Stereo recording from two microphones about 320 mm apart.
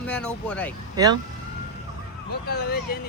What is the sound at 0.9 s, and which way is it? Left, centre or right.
Speech, centre.